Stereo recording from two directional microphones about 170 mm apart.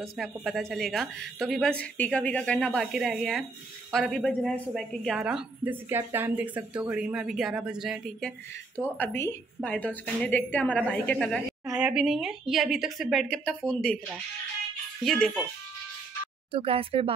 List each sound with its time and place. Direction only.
0.2 s a woman's voice: centre (ahead or behind)
8.7 s a woman's voice: 10° left (ahead or behind)
15.0 s a woman's voice: centre (ahead or behind)
16.5 s speech: 35° right (ahead or behind)